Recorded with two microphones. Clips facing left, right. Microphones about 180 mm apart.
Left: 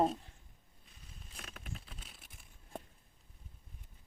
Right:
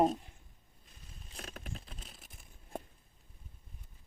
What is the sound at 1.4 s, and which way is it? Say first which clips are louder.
Patter: right 4 dB; 40° right (ahead or behind).